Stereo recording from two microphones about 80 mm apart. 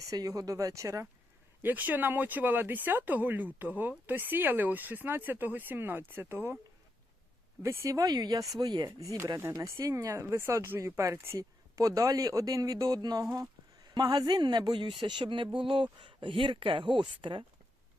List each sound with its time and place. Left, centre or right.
0.1 s speech: right
1.6 s speech: right
7.6 s speech: right
8.0 s speech: right
9.5 s speech: right
9.9 s speech: right